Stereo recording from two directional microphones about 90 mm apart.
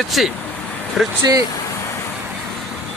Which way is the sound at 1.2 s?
45° right (ahead or behind).